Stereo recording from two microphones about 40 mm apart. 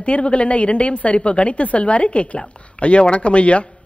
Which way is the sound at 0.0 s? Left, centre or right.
Left.